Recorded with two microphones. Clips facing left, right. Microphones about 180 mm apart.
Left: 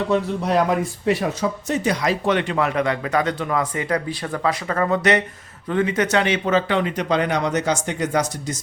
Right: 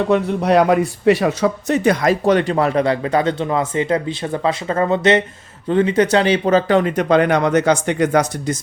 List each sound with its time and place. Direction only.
0.1 s speech: 65° right (ahead or behind)